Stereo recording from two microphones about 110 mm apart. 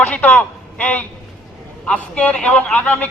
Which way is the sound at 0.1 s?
15° left (ahead or behind).